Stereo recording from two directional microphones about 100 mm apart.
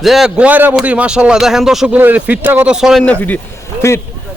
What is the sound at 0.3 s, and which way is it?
Speech, 15° right (ahead or behind).